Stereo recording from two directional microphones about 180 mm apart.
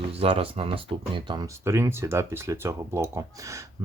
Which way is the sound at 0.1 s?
30° right (ahead or behind).